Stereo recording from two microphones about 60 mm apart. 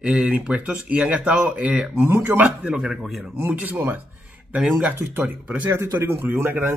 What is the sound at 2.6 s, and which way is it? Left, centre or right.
Speech, centre.